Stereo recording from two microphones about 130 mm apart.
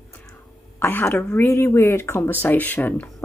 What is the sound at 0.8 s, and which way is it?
Speech, 15° left (ahead or behind).